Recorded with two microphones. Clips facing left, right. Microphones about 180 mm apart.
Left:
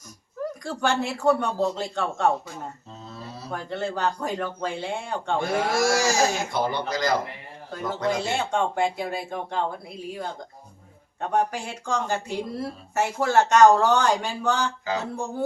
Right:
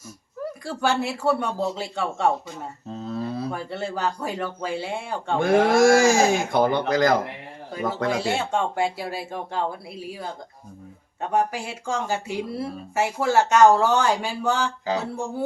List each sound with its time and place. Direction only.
0.6 s speech: 5° right (ahead or behind)
3.1 s a sound: 55° right (ahead or behind)
3.5 s speech: 5° right (ahead or behind)
5.4 s speech: 50° right (ahead or behind)
8.2 s speech: 5° right (ahead or behind)